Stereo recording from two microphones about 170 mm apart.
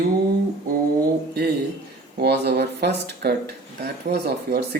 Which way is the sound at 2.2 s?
75° right (ahead or behind).